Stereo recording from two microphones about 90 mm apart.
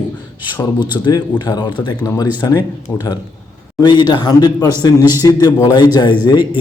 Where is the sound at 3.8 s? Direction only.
55° left (ahead or behind).